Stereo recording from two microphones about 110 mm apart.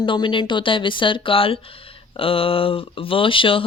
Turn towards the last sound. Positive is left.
turn(degrees=55)  # may be behind; listen again after turning